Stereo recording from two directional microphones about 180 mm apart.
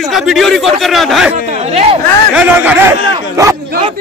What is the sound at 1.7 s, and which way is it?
Speech, 35° right (ahead or behind).